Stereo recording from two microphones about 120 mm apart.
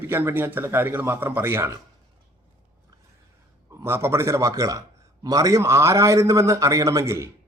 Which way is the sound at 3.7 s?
20° right (ahead or behind).